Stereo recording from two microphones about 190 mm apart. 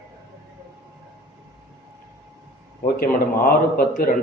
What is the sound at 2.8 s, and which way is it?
A man's voice, 50° left (ahead or behind).